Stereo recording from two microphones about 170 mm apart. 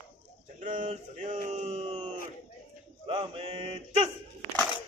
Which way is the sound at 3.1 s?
35° right (ahead or behind).